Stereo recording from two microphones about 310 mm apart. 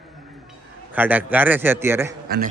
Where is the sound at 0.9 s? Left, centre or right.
Centre.